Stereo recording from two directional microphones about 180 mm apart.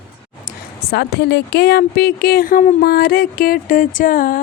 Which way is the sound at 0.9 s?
60° left (ahead or behind).